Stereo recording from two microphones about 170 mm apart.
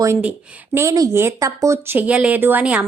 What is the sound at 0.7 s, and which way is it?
Speech, 20° right (ahead or behind).